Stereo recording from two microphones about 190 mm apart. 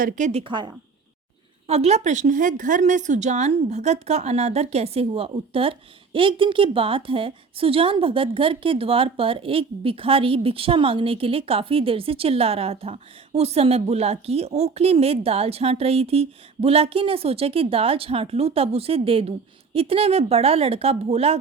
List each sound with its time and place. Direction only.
0.0 s a woman's voice: 35° right (ahead or behind)